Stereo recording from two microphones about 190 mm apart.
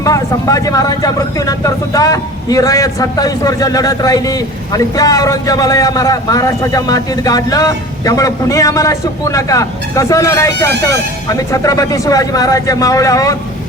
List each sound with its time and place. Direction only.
0.0 s speech: 15° left (ahead or behind)